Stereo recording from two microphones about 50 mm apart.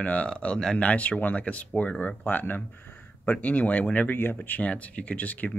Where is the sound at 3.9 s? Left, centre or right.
Left.